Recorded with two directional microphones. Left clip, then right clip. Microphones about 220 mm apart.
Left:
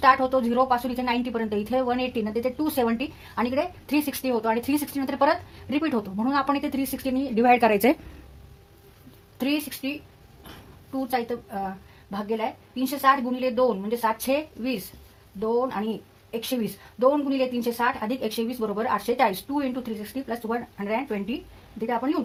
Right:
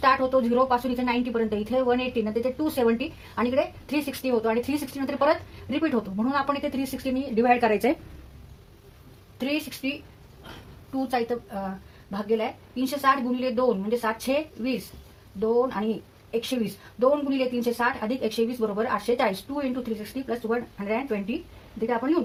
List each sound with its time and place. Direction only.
0.0 s a woman's voice: 40° left (ahead or behind)
9.4 s a woman's voice: 40° left (ahead or behind)
10.9 s a woman's voice: 40° left (ahead or behind)